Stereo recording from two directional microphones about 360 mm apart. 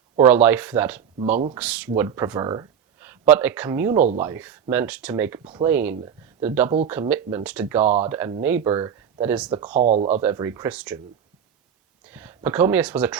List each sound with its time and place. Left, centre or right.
0.2 s speech: centre
7.9 s speech: centre
8.2 s speech: centre
10.2 s speech: centre
12.1 s speech: centre